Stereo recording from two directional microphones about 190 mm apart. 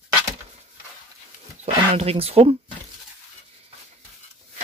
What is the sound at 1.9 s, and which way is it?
Speech, 30° right (ahead or behind).